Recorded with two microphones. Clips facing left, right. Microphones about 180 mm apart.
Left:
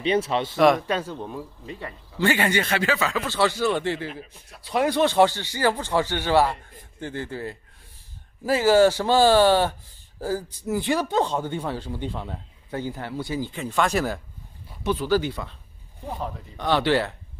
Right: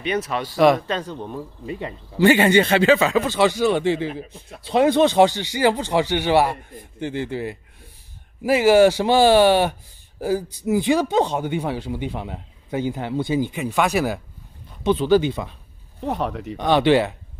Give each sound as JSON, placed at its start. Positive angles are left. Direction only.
{"t": 0.0, "sound": "speech", "side_deg": 30}
{"t": 0.6, "sound": "speech", "side_deg": 0}
{"t": 1.8, "sound": "a man's voice", "side_deg": -20}
{"t": 14.9, "sound": "a man's voice", "side_deg": -20}
{"t": 16.0, "sound": "speech", "side_deg": -75}
{"t": 16.5, "sound": "speech", "side_deg": -20}